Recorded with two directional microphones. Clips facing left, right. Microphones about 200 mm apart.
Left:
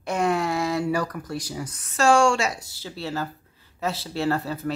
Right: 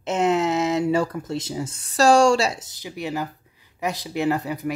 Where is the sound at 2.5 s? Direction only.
20° right (ahead or behind).